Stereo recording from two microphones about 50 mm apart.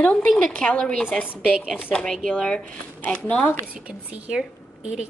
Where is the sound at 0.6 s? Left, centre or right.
Left.